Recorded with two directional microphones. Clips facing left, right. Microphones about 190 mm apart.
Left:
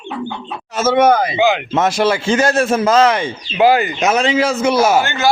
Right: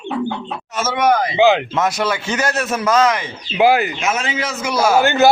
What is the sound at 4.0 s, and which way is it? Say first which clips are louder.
Speech: left 7 dB; 35° left (ahead or behind).